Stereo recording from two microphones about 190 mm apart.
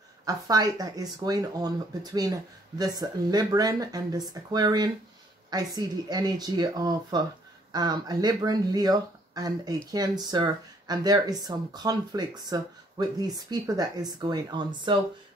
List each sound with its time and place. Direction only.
0.2 s speech: 20° right (ahead or behind)
2.8 s speech: 20° right (ahead or behind)